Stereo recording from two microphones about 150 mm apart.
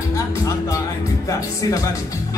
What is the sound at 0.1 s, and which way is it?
Music, 20° left (ahead or behind).